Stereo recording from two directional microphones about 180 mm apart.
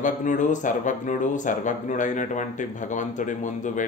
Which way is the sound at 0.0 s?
45° left (ahead or behind).